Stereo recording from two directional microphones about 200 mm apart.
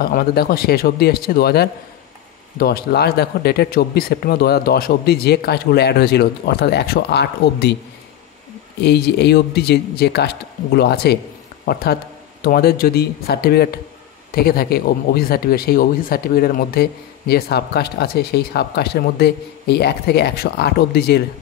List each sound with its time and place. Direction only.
0.0 s speech: 50° left (ahead or behind)
8.8 s speech: 55° left (ahead or behind)